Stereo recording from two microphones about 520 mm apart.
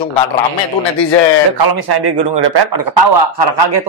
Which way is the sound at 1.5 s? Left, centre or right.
Right.